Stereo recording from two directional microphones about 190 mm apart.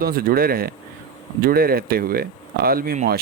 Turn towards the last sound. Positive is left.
turn(degrees=-50)  # may be behind; listen again after turning